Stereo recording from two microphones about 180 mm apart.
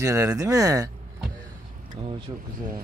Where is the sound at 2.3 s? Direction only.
25° right (ahead or behind).